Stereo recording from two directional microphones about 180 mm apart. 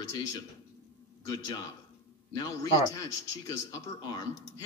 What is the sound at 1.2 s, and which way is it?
Speech, 20° left (ahead or behind).